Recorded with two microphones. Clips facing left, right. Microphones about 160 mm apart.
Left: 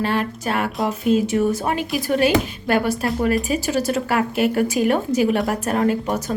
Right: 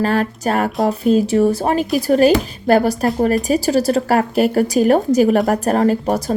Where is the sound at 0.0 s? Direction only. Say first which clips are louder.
Right 5 dB; 40° right (ahead or behind).